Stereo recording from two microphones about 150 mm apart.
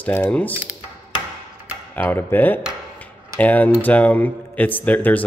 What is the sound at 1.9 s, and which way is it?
Speech, 15° left (ahead or behind).